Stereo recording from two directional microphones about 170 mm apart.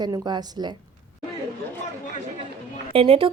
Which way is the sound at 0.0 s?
25° right (ahead or behind).